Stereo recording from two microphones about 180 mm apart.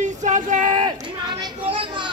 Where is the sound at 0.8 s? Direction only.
25° right (ahead or behind).